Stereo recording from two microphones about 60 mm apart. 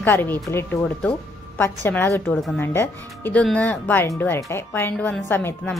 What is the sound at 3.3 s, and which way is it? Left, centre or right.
Speech, left.